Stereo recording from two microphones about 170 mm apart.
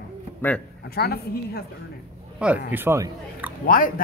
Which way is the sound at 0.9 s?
65° left (ahead or behind).